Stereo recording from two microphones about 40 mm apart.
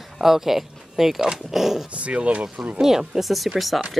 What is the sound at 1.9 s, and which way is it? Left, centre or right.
Speech, right.